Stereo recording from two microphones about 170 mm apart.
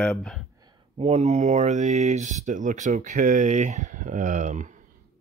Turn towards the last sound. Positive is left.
turn(degrees=-45)  # may be behind; listen again after turning